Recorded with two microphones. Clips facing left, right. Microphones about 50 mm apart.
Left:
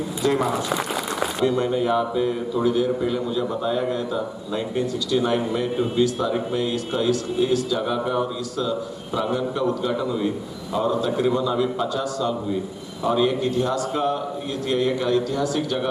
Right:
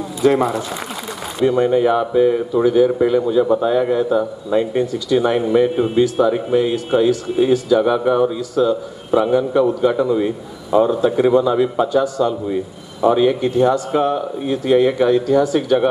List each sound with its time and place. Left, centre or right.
0.2 s a man's voice: right